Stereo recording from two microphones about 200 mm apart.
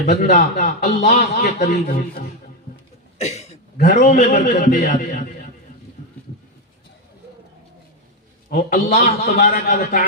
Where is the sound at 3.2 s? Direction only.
30° left (ahead or behind).